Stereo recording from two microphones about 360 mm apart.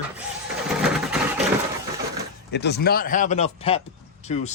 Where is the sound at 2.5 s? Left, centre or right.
Left.